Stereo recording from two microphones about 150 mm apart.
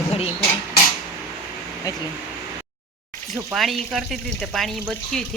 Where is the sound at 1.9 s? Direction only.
25° left (ahead or behind).